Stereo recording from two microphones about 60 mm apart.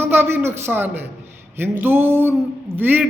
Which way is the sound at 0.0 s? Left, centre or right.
Right.